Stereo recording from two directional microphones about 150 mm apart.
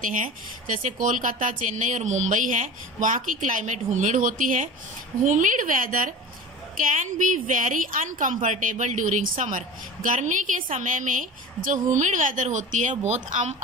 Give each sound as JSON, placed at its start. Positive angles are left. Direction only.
{"t": 0.0, "sound": "speech", "side_deg": -60}